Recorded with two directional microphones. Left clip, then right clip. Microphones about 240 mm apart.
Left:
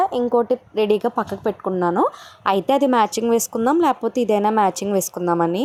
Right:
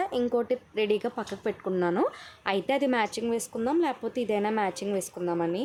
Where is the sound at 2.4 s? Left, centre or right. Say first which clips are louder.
Left 9 dB; centre.